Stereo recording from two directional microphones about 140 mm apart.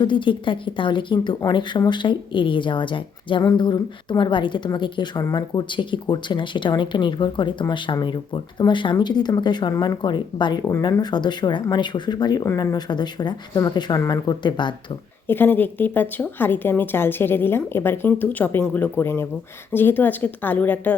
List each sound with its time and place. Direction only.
0.0 s speech: 35° left (ahead or behind)
15.3 s a woman's voice: 15° left (ahead or behind)